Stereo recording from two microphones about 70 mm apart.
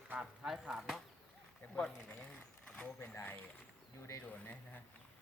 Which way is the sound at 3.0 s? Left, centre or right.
Left.